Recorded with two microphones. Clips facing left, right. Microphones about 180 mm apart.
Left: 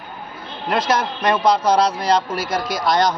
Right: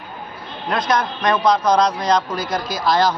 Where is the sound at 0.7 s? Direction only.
5° left (ahead or behind).